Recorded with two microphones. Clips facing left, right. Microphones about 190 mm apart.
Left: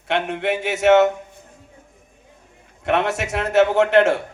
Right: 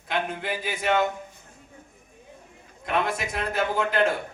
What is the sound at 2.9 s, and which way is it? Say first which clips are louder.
A man's voice: left 6 dB; 75° left (ahead or behind).